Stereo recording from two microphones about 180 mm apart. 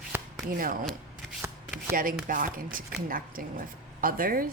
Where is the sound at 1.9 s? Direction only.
50° right (ahead or behind).